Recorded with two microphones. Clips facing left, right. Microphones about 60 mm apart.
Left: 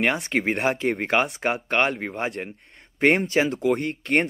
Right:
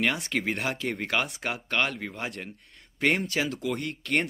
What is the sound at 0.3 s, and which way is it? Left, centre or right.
Speech, left.